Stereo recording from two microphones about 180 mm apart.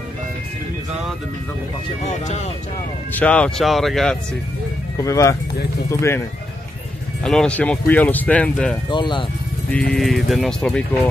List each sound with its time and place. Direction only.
2.0 s speech: 40° left (ahead or behind)
3.1 s speech: 10° left (ahead or behind)
4.9 s speech: 15° left (ahead or behind)
7.2 s speech: 5° left (ahead or behind)
8.9 s speech: 25° left (ahead or behind)
9.7 s speech: 5° left (ahead or behind)